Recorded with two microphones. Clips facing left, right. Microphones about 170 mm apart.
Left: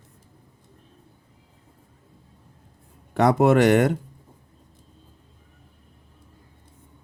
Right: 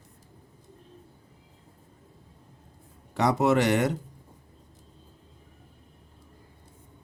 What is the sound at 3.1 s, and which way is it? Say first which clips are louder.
Speech: left 5 dB; 55° left (ahead or behind).